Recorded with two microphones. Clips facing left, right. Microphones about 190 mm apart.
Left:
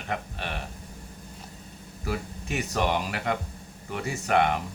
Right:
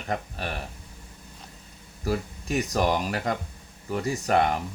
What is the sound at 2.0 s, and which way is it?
Speech, 40° right (ahead or behind).